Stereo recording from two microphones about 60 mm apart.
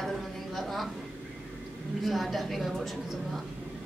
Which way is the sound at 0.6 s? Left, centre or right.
Centre.